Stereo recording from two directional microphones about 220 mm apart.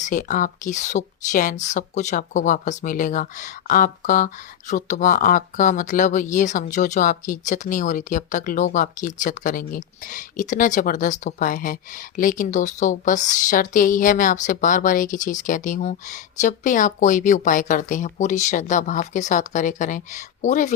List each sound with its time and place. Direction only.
0.0 s speech: 35° left (ahead or behind)